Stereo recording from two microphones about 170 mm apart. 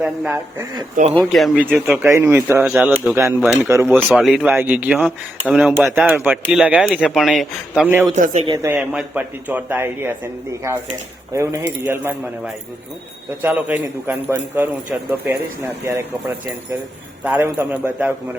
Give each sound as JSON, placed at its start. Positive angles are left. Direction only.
{"t": 0.0, "sound": "speech", "side_deg": -5}
{"t": 3.9, "sound": "speech", "side_deg": 0}
{"t": 8.1, "sound": "speech", "side_deg": -45}
{"t": 8.4, "sound": "speech", "side_deg": -20}
{"t": 11.3, "sound": "speech", "side_deg": -15}
{"t": 13.4, "sound": "speech", "side_deg": -10}